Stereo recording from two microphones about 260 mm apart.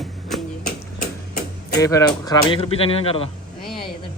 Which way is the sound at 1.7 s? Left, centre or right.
Centre.